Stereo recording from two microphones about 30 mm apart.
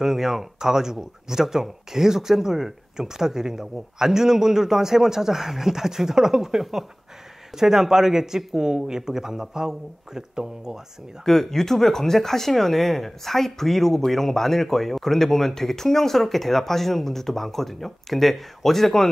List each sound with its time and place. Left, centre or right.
0.0 s speech: centre
11.2 s speech: centre